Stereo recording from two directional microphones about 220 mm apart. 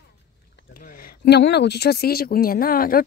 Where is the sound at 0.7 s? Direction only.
40° left (ahead or behind).